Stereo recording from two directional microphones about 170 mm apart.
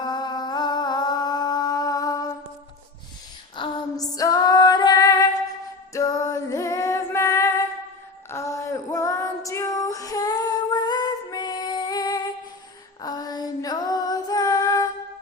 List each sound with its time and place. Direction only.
0.0 s a sound: 25° left (ahead or behind)
3.5 s female singing: 30° left (ahead or behind)
5.9 s music: 20° left (ahead or behind)
8.3 s female singing: 15° left (ahead or behind)